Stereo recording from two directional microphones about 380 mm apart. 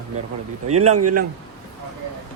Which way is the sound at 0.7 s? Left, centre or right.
Right.